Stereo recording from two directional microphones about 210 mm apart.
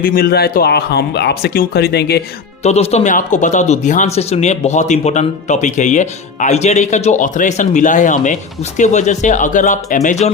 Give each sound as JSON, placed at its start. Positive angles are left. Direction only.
{"t": 0.0, "sound": "speech", "side_deg": 45}
{"t": 2.6, "sound": "speech", "side_deg": 30}